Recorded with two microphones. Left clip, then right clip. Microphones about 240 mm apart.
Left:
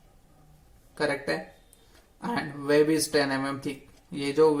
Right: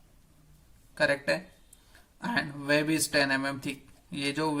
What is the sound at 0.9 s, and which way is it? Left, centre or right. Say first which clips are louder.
Speech: right 1 dB; right.